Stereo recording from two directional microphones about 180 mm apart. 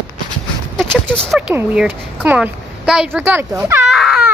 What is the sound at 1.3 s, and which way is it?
A woman's voice, 5° right (ahead or behind).